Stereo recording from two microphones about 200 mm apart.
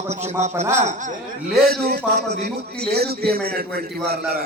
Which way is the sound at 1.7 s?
55° right (ahead or behind).